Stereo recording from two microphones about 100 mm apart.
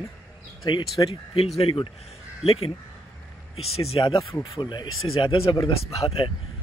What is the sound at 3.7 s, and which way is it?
Speech, 85° left.